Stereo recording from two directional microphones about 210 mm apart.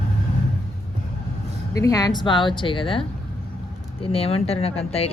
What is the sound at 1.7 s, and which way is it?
Speech, 15° left (ahead or behind).